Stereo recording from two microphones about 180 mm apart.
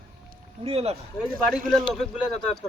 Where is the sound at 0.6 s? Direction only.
35° right (ahead or behind).